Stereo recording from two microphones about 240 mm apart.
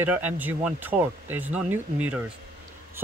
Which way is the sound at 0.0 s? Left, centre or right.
Centre.